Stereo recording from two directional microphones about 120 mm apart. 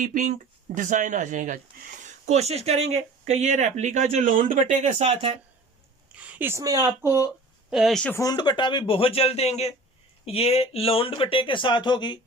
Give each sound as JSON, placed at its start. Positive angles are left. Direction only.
{"t": 0.0, "sound": "speech", "side_deg": -90}
{"t": 2.0, "sound": "speech", "side_deg": -80}
{"t": 6.1, "sound": "a sound", "side_deg": -10}
{"t": 6.6, "sound": "speech", "side_deg": -30}
{"t": 7.7, "sound": "speech", "side_deg": 0}
{"t": 8.1, "sound": "speech", "side_deg": 30}